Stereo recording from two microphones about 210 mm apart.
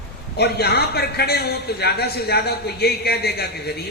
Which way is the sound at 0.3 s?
50° left (ahead or behind).